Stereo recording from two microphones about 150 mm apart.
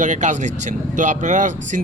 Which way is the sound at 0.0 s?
55° right (ahead or behind).